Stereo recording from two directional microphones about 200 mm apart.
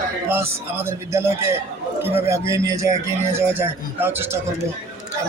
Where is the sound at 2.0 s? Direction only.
10° right (ahead or behind).